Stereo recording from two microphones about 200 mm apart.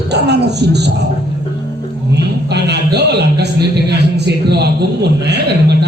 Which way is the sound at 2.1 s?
55° right (ahead or behind).